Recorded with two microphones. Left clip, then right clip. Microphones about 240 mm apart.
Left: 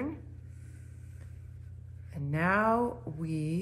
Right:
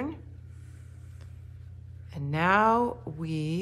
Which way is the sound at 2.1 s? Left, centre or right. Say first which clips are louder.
Right 5 dB; centre.